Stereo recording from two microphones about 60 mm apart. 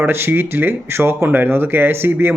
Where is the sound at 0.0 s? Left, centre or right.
Right.